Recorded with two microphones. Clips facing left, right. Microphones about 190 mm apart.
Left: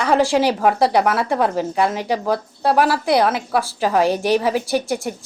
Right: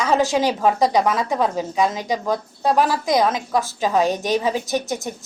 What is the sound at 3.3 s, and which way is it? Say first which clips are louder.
A woman's voice: left 1 dB; 10° left (ahead or behind).